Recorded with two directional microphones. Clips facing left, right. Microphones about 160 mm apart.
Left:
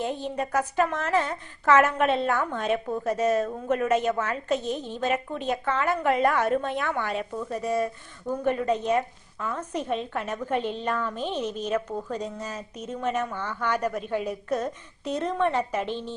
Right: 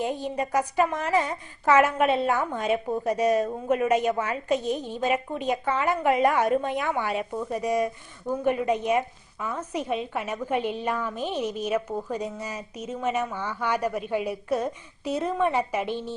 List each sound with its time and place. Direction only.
0.0 s speech: 10° right (ahead or behind)